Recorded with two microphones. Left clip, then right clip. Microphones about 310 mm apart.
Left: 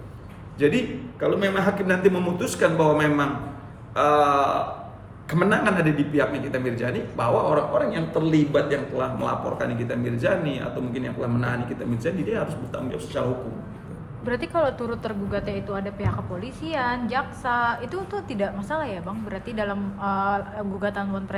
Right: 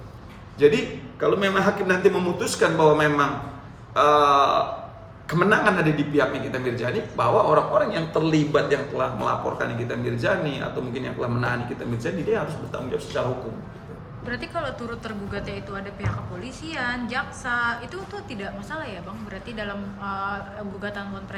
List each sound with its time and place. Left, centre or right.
1.2 s a man's voice: centre
14.3 s a woman's voice: centre